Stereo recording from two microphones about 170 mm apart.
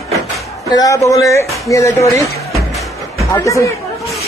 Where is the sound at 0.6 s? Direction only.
20° left (ahead or behind).